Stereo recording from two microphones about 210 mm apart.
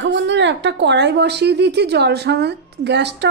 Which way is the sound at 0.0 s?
60° right (ahead or behind).